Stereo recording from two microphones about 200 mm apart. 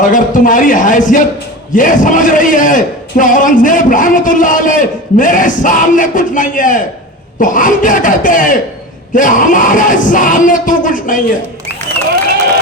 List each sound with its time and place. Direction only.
0.0 s a man's voice: 40° left (ahead or behind)